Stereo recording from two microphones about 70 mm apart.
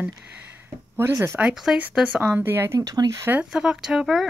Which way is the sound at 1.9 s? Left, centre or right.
Centre.